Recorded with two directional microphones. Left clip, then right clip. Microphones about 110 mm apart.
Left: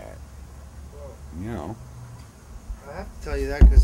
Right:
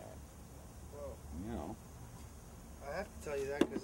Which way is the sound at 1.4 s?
15° left (ahead or behind).